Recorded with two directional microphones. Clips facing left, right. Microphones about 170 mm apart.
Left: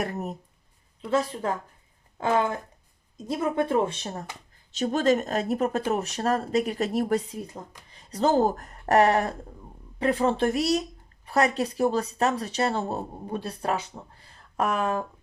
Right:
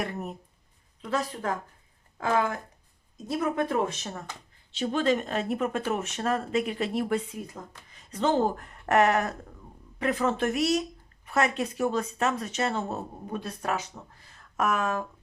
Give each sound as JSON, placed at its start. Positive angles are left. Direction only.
{"t": 0.0, "sound": "speech", "side_deg": 40}
{"t": 2.2, "sound": "speech", "side_deg": 25}